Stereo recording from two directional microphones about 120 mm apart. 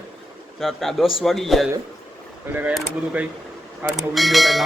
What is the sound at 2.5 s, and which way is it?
Speech, 15° right (ahead or behind).